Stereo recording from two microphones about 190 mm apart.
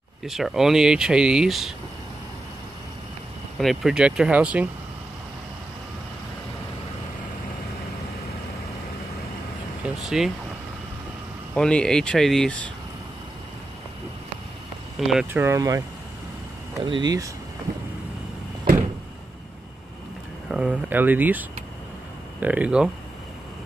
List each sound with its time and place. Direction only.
0.2 s speech: centre (ahead or behind)
3.5 s speech: centre (ahead or behind)
10.0 s speech: centre (ahead or behind)
11.5 s speech: 5° left (ahead or behind)
15.0 s speech: centre (ahead or behind)
16.8 s speech: 25° right (ahead or behind)
20.5 s speech: 5° right (ahead or behind)